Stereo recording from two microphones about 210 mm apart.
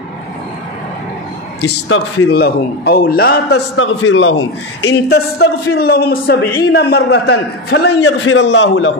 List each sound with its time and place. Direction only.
1.6 s a man's voice: 55° left (ahead or behind)